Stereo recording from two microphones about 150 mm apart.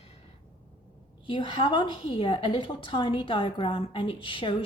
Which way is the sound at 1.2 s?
35° left (ahead or behind).